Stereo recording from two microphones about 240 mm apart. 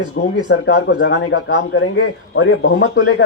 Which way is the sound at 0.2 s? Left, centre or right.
Left.